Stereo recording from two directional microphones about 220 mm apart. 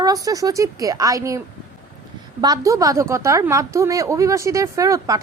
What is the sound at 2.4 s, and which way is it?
A woman's voice, 15° right (ahead or behind).